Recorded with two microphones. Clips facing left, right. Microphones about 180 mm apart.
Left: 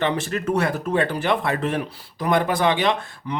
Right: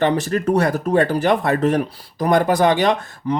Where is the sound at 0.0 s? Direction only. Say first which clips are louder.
Right 5 dB; 40° right (ahead or behind).